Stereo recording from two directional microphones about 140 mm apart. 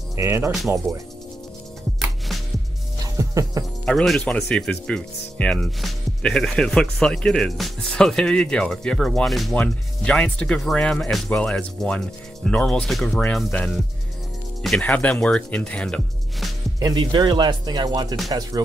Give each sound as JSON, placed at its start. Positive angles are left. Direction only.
{"t": 0.1, "sound": "speech", "side_deg": -20}
{"t": 3.2, "sound": "music", "side_deg": -25}
{"t": 3.8, "sound": "speech", "side_deg": 5}
{"t": 14.6, "sound": "speech", "side_deg": 5}
{"t": 16.8, "sound": "speech", "side_deg": -35}